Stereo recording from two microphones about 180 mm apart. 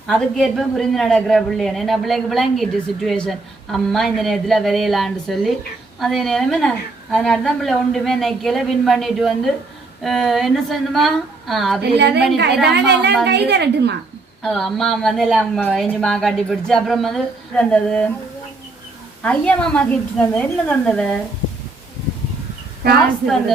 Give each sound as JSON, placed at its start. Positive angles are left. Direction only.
{"t": 0.1, "sound": "a woman's voice", "side_deg": 0}
{"t": 11.8, "sound": "a woman's voice", "side_deg": -70}
{"t": 14.4, "sound": "a woman's voice", "side_deg": 5}
{"t": 19.2, "sound": "a woman's voice", "side_deg": 5}